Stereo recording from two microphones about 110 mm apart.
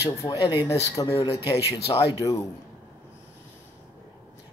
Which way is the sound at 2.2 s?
35° left (ahead or behind).